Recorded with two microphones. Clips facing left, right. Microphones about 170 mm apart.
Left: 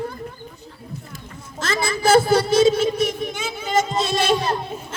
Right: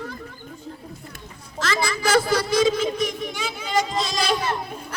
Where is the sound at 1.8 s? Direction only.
25° left (ahead or behind).